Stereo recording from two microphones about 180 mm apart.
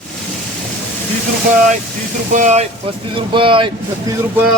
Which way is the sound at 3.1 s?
30° right (ahead or behind).